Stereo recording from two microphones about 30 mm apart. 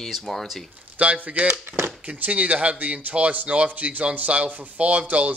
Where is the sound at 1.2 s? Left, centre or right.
Right.